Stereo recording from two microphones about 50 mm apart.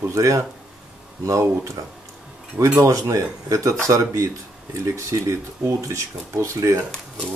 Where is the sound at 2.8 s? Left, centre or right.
Right.